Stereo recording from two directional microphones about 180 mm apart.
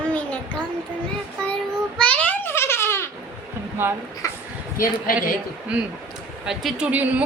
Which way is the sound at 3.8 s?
10° right (ahead or behind).